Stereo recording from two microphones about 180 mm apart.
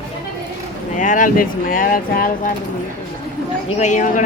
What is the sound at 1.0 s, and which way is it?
Speech, 45° left (ahead or behind).